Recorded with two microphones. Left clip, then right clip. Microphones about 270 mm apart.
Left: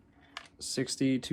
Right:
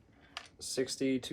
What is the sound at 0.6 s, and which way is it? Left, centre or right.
Speech, left.